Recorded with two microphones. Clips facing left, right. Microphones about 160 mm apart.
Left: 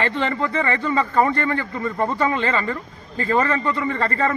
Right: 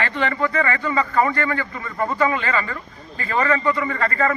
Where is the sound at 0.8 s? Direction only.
25° left (ahead or behind).